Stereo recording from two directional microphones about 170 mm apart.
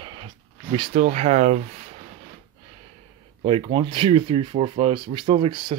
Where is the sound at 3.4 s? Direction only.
35° right (ahead or behind).